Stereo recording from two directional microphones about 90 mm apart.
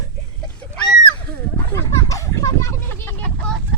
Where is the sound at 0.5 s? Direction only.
10° left (ahead or behind).